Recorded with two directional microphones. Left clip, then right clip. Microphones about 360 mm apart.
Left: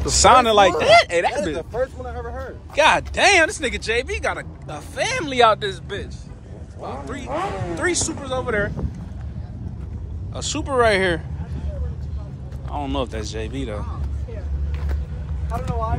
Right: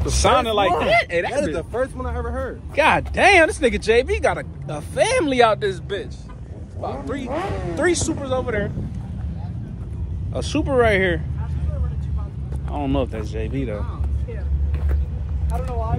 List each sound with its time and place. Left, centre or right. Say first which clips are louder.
0.0 s speech: left 4 dB; centre
1.3 s speech: right 2 dB; right
2.7 s speech: left 1 dB; centre
7.2 s speech: left 3 dB; centre
7.7 s speech: right 4 dB; centre
10.3 s speech: right 2 dB; centre
12.7 s speech: right 2 dB; centre